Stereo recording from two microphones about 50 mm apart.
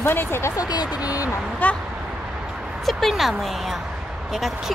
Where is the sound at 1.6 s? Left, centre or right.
Left.